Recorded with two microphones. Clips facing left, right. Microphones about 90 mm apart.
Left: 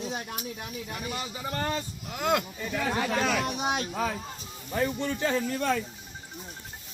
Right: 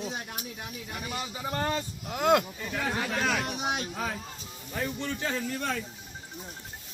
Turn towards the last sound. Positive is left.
turn(degrees=5)  # may be behind; listen again after turning